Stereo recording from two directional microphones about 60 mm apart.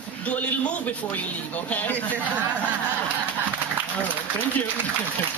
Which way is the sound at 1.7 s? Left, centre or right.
Left.